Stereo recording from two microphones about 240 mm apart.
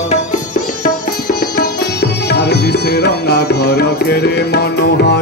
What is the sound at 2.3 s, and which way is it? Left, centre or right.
Music, left.